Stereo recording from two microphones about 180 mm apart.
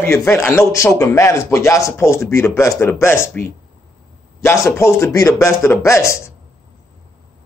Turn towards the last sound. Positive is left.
turn(degrees=15)  # may be behind; listen again after turning